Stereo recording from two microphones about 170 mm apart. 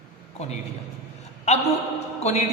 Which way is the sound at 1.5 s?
40° left (ahead or behind).